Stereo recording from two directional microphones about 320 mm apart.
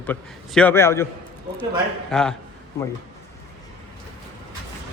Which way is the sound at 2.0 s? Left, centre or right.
Centre.